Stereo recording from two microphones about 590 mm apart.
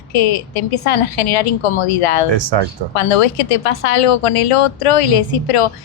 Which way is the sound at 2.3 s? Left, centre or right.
Right.